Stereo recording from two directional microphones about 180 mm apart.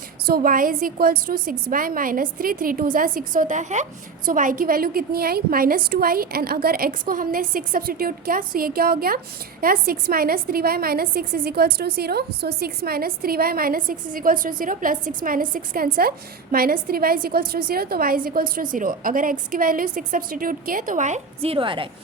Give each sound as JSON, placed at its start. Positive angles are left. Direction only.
{"t": 0.3, "sound": "a woman's voice", "side_deg": -55}